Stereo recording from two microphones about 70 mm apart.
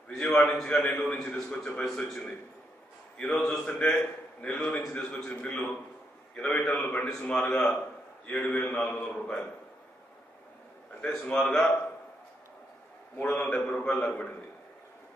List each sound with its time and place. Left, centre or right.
0.1 s a man's voice: centre
3.4 s a man's voice: centre
11.0 s a man's voice: centre
13.3 s a man's voice: centre